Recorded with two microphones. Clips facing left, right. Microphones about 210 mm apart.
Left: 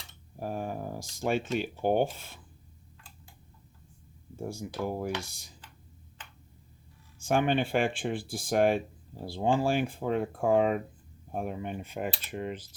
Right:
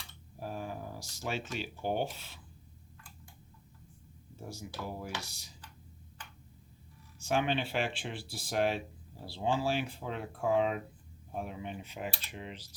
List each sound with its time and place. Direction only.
0.3 s a sound: 50° left (ahead or behind)
1.5 s speech: 50° left (ahead or behind)
4.4 s speech: 50° left (ahead or behind)
7.2 s speech: 50° left (ahead or behind)